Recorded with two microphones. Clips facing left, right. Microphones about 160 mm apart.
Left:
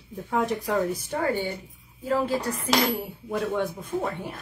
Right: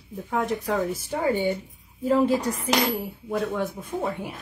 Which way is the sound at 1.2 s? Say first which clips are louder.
Right 3 dB; 20° right (ahead or behind).